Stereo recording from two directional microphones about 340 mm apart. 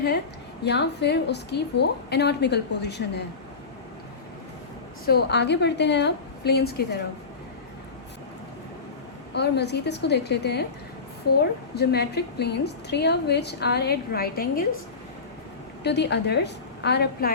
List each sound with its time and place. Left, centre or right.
0.6 s a woman's voice: left
5.0 s a woman's voice: left
9.3 s a woman's voice: left
11.7 s a woman's voice: left
15.8 s a woman's voice: left